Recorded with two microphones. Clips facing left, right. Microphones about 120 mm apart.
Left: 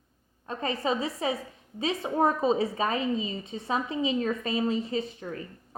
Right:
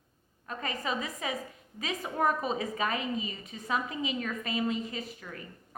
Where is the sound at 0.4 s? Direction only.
30° left (ahead or behind).